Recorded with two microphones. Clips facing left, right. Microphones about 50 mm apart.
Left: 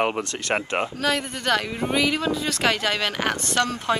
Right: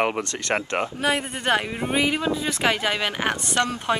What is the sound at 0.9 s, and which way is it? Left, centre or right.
A woman's voice, right.